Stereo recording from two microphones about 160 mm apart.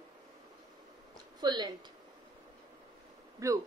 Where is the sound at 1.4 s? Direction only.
25° right (ahead or behind).